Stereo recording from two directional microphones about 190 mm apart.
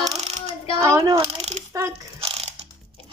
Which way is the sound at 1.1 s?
30° right (ahead or behind).